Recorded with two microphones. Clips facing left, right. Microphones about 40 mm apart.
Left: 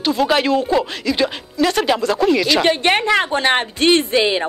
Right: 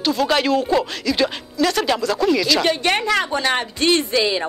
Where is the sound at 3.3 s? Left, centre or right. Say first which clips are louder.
Left 3 dB; left.